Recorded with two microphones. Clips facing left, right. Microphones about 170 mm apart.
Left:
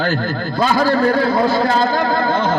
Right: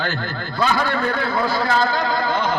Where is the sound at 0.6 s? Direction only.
35° left (ahead or behind).